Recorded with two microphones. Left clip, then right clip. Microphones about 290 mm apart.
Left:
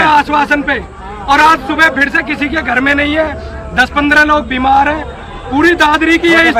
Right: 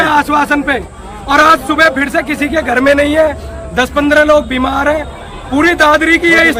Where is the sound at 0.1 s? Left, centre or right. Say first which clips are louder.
Left 1 dB; centre.